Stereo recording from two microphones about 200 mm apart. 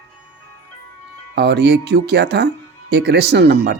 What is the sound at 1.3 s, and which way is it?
Speech, 55° right (ahead or behind).